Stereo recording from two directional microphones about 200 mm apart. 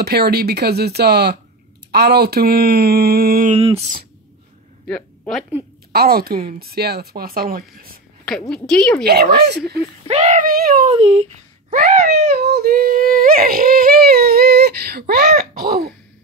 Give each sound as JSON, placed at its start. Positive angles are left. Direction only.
{"t": 0.0, "sound": "speech", "side_deg": -50}
{"t": 3.5, "sound": "speech", "side_deg": -30}
{"t": 4.8, "sound": "a sound", "side_deg": 5}
{"t": 5.9, "sound": "a woman's voice", "side_deg": -50}
{"t": 8.3, "sound": "a woman's voice", "side_deg": 5}
{"t": 9.0, "sound": "speech", "side_deg": -55}
{"t": 10.0, "sound": "speech", "side_deg": -35}
{"t": 10.9, "sound": "speech", "side_deg": -30}
{"t": 11.7, "sound": "speech", "side_deg": -50}